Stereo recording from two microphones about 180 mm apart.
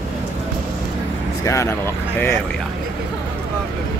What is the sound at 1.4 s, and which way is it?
Speech, 15° left (ahead or behind).